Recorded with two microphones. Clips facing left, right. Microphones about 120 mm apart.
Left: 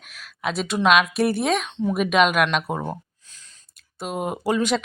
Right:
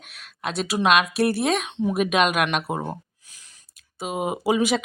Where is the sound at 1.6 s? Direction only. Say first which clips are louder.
Even; 10° right (ahead or behind).